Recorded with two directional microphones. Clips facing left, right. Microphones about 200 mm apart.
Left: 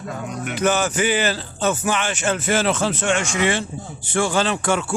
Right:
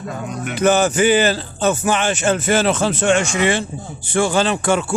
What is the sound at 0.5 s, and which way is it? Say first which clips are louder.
A man's voice: right 5 dB; 30° right (ahead or behind).